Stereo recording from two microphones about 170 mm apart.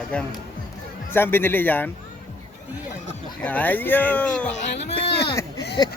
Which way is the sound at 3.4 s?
10° left (ahead or behind).